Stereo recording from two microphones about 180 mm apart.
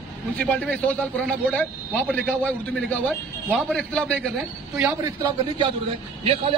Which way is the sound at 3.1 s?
5° left (ahead or behind).